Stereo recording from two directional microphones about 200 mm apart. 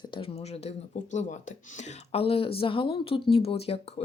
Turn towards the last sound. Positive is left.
turn(degrees=30)  # may be behind; listen again after turning